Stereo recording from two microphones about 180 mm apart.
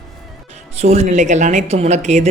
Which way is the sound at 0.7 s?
35° right (ahead or behind).